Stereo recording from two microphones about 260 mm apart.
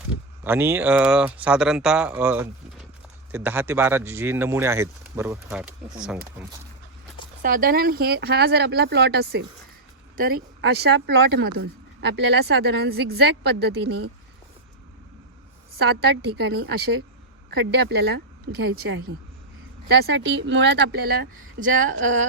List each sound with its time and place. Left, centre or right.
0.4 s speech: centre
7.4 s speech: right
15.8 s a woman's voice: right